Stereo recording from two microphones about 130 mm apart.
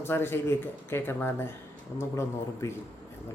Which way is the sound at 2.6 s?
20° left (ahead or behind).